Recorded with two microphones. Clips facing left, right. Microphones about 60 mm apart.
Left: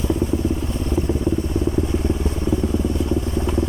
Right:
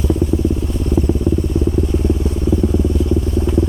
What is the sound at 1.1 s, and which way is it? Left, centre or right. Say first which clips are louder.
Vehicle: right 4 dB; centre.